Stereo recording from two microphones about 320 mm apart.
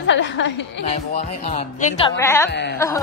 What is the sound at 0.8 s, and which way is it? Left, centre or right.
A woman's voice, centre.